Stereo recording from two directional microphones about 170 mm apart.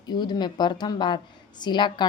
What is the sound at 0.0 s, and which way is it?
A woman's voice, 25° left (ahead or behind).